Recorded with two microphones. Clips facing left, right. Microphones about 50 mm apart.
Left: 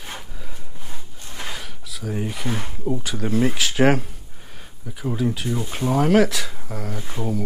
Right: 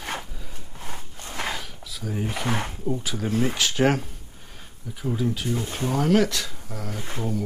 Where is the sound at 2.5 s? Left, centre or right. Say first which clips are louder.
Right 1 dB; right.